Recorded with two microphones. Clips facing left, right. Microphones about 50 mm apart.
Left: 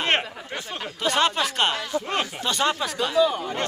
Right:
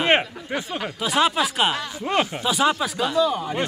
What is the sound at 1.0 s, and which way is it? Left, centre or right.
Speech, centre.